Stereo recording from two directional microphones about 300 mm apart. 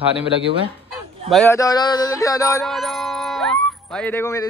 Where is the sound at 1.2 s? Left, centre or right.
Centre.